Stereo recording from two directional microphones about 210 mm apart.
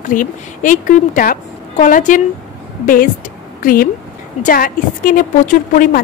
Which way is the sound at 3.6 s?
45° left (ahead or behind).